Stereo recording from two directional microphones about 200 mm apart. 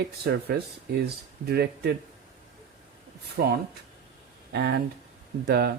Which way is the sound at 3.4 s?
50° right (ahead or behind).